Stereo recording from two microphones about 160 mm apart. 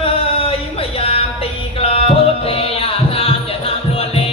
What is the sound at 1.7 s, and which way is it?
Music, 35° left (ahead or behind).